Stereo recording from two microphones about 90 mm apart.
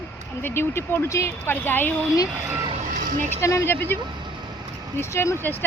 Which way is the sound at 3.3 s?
35° left (ahead or behind).